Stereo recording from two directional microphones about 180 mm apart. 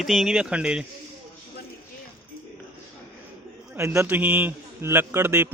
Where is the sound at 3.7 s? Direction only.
15° right (ahead or behind).